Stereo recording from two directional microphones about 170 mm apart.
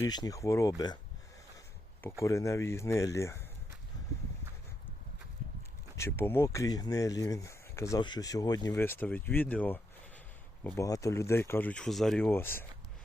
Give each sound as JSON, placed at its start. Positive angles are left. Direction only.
{"t": 0.0, "sound": "speech", "side_deg": 20}
{"t": 2.2, "sound": "speech", "side_deg": 20}
{"t": 6.0, "sound": "speech", "side_deg": 15}
{"t": 12.2, "sound": "speech", "side_deg": 10}